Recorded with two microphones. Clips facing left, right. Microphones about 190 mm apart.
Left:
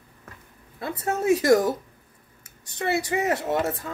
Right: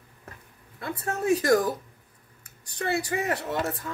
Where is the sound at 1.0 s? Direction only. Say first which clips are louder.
Left 3 dB; 20° left (ahead or behind).